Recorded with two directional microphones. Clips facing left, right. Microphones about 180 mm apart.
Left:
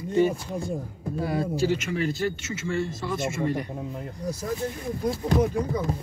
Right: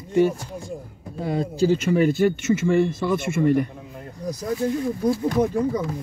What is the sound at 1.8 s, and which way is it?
Speech, 45° right (ahead or behind).